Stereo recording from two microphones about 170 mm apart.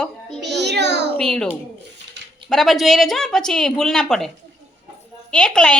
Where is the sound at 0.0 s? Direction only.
Centre (ahead or behind).